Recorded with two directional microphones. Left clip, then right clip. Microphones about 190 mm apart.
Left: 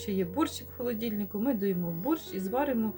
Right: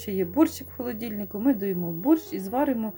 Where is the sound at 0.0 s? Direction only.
40° right (ahead or behind).